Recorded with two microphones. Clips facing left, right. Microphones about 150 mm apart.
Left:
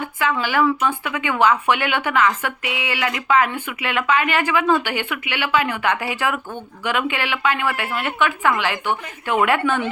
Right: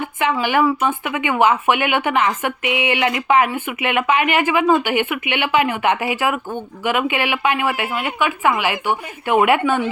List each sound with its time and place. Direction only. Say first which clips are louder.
0.4 s speech: right 2 dB; 20° right (ahead or behind)